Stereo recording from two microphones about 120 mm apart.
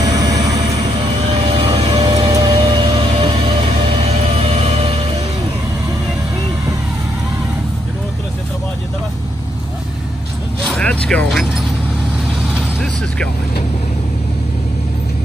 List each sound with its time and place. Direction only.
0.0 s vehicle: 30° right (ahead or behind)
1.6 s music: 45° right (ahead or behind)
1.9 s music: 30° right (ahead or behind); by 4.9 s 55° right (ahead or behind)
10.7 s vehicle: 10° left (ahead or behind)